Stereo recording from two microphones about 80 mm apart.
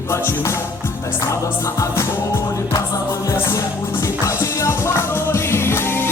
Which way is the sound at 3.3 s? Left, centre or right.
Left.